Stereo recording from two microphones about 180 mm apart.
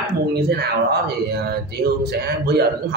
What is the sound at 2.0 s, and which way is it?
Speech, 60° right (ahead or behind).